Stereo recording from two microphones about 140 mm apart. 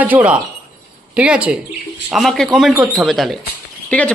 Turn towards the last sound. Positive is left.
turn(degrees=10)  # may be behind; listen again after turning